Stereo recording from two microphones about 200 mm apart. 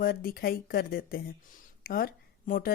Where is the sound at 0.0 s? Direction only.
45° left (ahead or behind).